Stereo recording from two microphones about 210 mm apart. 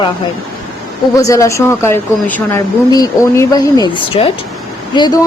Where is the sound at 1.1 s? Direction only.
15° left (ahead or behind).